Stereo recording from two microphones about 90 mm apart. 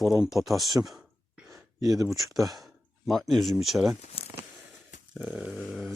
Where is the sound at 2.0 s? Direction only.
Centre (ahead or behind).